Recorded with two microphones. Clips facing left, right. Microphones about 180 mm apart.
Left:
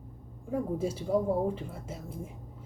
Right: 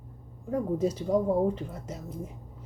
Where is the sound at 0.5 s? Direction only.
10° left (ahead or behind).